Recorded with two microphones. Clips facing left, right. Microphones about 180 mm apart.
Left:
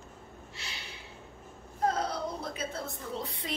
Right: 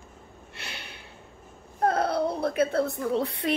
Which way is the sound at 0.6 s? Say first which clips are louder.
Right 6 dB; 60° right (ahead or behind).